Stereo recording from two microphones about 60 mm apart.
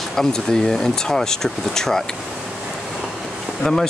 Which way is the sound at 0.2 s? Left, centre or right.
Centre.